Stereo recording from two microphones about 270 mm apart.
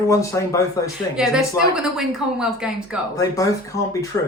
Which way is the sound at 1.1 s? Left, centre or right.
Centre.